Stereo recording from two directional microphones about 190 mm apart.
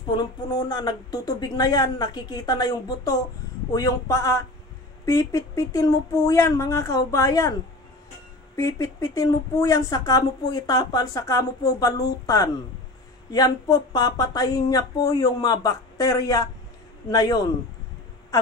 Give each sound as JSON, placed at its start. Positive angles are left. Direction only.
{"t": 0.1, "sound": "a woman's voice", "side_deg": 20}
{"t": 8.5, "sound": "a woman's voice", "side_deg": 15}